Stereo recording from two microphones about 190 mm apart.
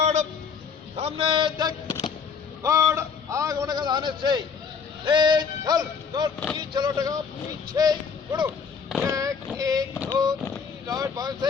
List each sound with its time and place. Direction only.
0.0 s vehicle: 40° right (ahead or behind)
0.9 s music: 30° right (ahead or behind)
2.6 s a man's voice: 15° right (ahead or behind)
5.0 s music: 25° right (ahead or behind)
7.7 s speech: 20° right (ahead or behind)
9.6 s boat: 20° right (ahead or behind)
10.0 s a sound: 15° right (ahead or behind)
10.8 s music: 20° right (ahead or behind)